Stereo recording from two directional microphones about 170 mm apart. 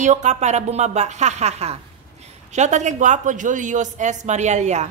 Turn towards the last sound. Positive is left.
turn(degrees=-45)  # may be behind; listen again after turning